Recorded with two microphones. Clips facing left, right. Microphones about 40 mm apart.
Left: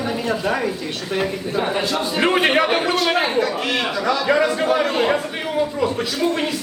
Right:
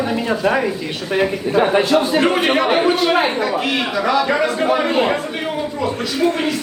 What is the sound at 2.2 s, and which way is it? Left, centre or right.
Speech, centre.